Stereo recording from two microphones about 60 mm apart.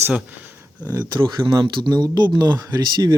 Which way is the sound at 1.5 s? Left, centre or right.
Right.